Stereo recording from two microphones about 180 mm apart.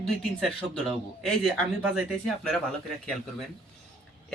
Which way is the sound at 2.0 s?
Centre (ahead or behind).